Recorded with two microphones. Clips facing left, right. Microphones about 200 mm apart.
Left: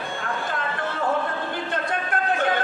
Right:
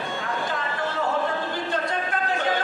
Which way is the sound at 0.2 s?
55° left (ahead or behind).